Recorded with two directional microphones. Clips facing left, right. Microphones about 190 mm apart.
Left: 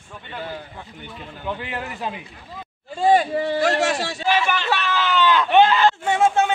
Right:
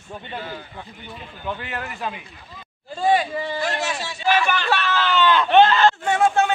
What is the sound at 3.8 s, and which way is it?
Speech, 90° left.